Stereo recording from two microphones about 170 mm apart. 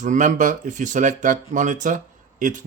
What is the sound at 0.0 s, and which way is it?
Speech, 45° right (ahead or behind).